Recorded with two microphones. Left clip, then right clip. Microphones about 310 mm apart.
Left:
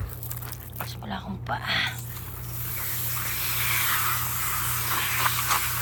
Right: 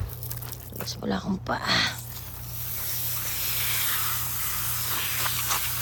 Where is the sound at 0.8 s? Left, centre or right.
Centre.